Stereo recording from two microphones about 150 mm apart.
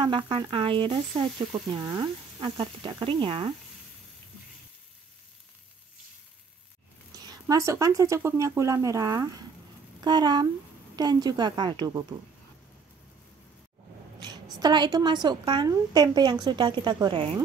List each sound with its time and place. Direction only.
0.0 s speech: 35° right (ahead or behind)
7.2 s speech: 25° right (ahead or behind)
14.2 s a sound: 30° right (ahead or behind)
15.2 s speech: 30° right (ahead or behind)